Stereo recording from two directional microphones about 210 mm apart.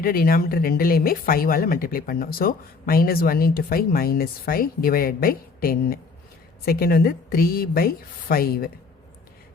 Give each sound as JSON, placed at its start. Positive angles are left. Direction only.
{"t": 0.0, "sound": "speech", "side_deg": 45}